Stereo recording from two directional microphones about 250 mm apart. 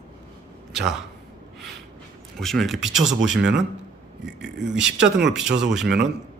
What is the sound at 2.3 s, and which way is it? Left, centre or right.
Speech, centre.